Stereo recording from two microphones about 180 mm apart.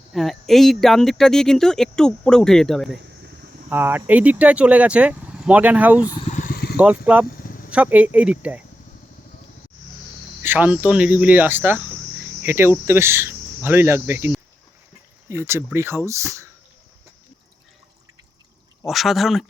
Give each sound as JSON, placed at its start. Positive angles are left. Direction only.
{"t": 0.1, "sound": "speech", "side_deg": 0}
{"t": 3.7, "sound": "speech", "side_deg": -10}
{"t": 6.1, "sound": "vehicle", "side_deg": 35}
{"t": 6.7, "sound": "speech", "side_deg": -10}
{"t": 10.4, "sound": "speech", "side_deg": -10}
{"t": 12.8, "sound": "cricket", "side_deg": -15}
{"t": 15.3, "sound": "speech", "side_deg": -15}
{"t": 18.9, "sound": "speech", "side_deg": 0}